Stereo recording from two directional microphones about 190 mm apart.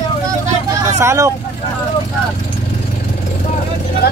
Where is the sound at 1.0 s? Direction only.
15° right (ahead or behind).